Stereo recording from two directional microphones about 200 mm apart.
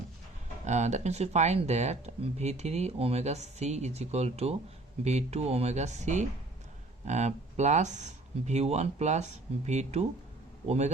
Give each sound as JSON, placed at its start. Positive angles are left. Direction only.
{"t": 0.6, "sound": "speech", "side_deg": -35}